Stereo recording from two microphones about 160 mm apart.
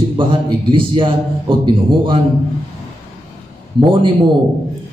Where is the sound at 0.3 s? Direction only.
30° right (ahead or behind).